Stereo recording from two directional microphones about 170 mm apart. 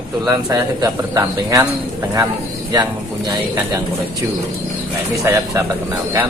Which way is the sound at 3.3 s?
15° right (ahead or behind).